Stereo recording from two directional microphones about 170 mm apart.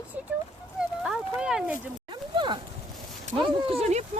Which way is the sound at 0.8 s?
5° right (ahead or behind).